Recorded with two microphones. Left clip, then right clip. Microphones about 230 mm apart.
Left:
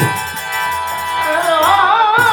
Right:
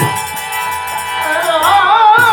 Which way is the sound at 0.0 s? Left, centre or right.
Centre.